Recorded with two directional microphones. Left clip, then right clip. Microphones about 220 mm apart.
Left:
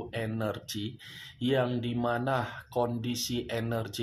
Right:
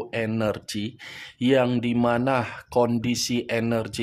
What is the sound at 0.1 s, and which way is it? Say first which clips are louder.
Speech: right 8 dB; 45° right (ahead or behind).